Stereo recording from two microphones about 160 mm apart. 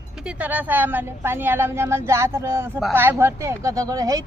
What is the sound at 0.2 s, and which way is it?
A woman's voice, 5° right (ahead or behind).